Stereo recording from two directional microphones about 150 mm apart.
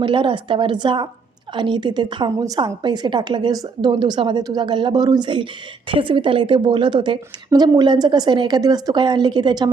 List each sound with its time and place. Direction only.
0.0 s a woman's voice: 35° right (ahead or behind)